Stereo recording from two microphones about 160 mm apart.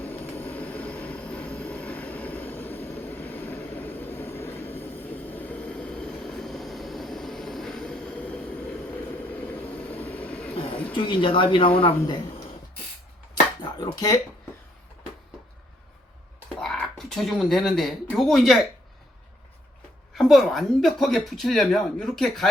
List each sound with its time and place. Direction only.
0.0 s vehicle: 10° left (ahead or behind)
10.9 s speech: 30° left (ahead or behind)
13.7 s speech: 25° left (ahead or behind)
16.6 s speech: 5° left (ahead or behind)
20.1 s speech: centre (ahead or behind)